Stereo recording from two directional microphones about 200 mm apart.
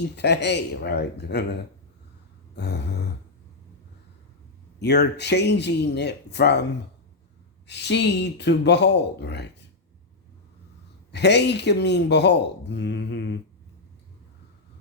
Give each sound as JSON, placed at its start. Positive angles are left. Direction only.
{"t": 0.2, "sound": "speech", "side_deg": 60}
{"t": 2.6, "sound": "speech", "side_deg": 55}
{"t": 4.8, "sound": "speech", "side_deg": 55}
{"t": 7.7, "sound": "speech", "side_deg": 60}
{"t": 11.1, "sound": "speech", "side_deg": 60}